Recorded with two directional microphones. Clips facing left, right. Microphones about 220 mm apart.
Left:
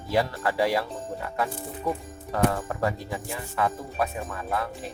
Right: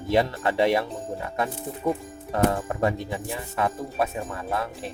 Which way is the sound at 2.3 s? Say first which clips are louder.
Right 2 dB; 25° right (ahead or behind).